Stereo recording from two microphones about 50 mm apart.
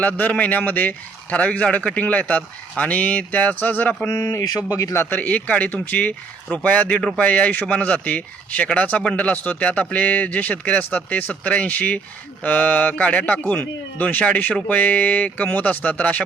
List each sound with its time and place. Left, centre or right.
0.0 s speech: left
4.0 s speech: left
5.2 s speech: left
6.9 s speech: centre
7.3 s speech: left